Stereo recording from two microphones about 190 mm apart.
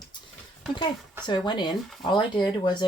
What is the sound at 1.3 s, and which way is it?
Speech, 25° left (ahead or behind).